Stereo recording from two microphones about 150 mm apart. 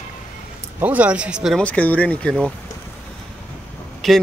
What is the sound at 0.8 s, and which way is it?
Speech, 10° right (ahead or behind).